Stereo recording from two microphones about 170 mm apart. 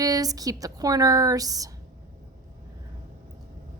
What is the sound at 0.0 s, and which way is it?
A woman's voice, 20° right (ahead or behind).